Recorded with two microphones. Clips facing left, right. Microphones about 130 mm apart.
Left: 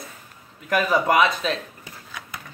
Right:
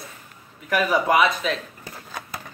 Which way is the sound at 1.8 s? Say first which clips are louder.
Right 4 dB; 40° right (ahead or behind).